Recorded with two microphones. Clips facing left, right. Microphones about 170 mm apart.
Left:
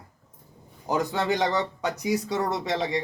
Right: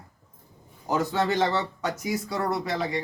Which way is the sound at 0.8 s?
15° left (ahead or behind).